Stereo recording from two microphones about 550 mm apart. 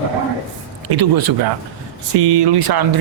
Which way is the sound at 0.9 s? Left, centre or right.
Right.